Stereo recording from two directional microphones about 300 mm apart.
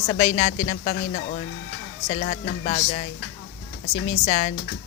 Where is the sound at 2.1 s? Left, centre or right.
Centre.